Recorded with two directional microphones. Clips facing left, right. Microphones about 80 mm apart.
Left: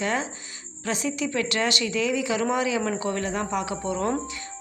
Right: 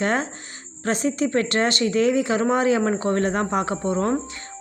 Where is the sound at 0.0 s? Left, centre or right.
Right.